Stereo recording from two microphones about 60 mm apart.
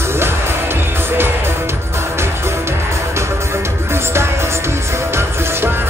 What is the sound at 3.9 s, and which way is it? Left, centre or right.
Music, right.